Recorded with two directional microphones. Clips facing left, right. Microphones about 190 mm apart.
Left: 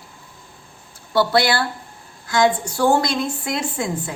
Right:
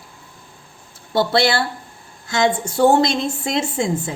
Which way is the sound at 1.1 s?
25° right (ahead or behind).